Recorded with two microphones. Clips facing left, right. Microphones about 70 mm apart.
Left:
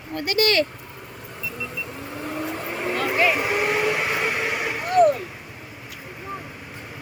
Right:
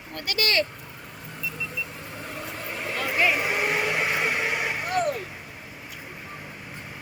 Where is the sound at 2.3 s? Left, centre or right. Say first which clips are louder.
Left 6 dB; left.